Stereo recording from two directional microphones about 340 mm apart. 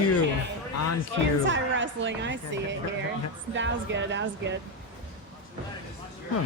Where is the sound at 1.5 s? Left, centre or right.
Right.